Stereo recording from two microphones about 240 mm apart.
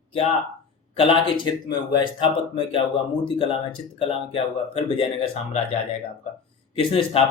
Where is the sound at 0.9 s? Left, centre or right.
Left.